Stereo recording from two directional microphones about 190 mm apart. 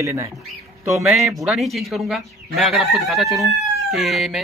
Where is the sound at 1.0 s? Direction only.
Centre (ahead or behind).